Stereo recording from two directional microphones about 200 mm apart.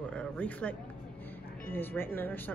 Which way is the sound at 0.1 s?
5° left (ahead or behind).